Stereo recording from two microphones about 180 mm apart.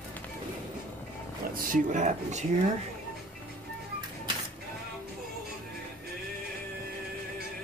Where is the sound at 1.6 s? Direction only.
45° right (ahead or behind).